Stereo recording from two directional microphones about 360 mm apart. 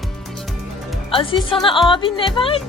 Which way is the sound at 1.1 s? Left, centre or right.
Centre.